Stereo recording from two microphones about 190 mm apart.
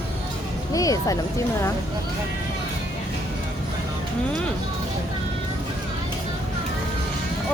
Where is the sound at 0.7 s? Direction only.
20° left (ahead or behind).